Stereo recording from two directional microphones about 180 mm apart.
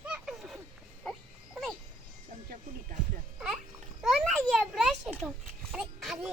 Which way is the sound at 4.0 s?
Centre (ahead or behind).